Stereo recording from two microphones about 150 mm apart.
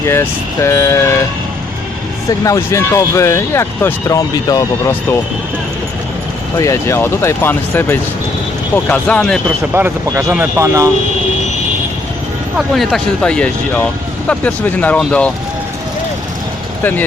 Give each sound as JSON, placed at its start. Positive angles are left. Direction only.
{"t": 0.0, "sound": "speech", "side_deg": 15}
{"t": 2.4, "sound": "speech", "side_deg": 20}
{"t": 6.6, "sound": "speech", "side_deg": 20}
{"t": 9.7, "sound": "speech", "side_deg": -15}
{"t": 12.5, "sound": "speech", "side_deg": 0}